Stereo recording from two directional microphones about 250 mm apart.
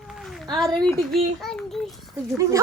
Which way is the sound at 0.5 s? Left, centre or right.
Centre.